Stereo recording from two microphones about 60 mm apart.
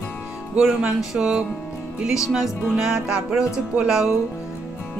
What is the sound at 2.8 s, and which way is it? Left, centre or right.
Speech, centre.